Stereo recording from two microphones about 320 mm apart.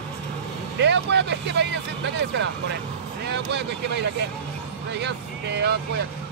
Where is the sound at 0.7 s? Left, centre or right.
Right.